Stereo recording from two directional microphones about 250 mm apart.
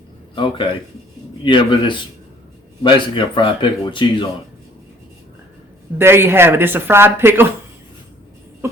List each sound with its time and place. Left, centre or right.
0.3 s a man's voice: centre
6.0 s speech: centre
8.6 s a sound: centre